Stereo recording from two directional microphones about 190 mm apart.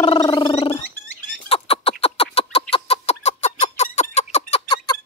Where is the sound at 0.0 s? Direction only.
25° left (ahead or behind).